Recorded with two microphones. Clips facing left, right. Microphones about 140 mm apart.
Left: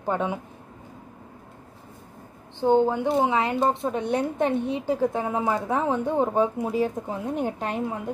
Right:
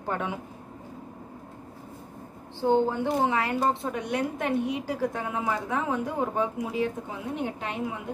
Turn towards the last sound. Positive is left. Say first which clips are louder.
# left 4 dB
turn(degrees=40)  # may be behind; listen again after turning